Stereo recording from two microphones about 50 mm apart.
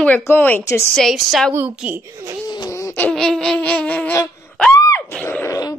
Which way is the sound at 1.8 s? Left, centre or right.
Centre.